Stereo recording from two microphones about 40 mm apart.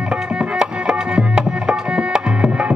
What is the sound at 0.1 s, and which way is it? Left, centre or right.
Tabla, right.